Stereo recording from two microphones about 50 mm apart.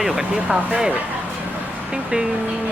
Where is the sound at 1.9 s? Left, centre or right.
Centre.